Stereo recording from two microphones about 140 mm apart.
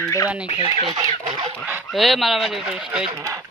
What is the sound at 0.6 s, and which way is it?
Speech, 35° right (ahead or behind).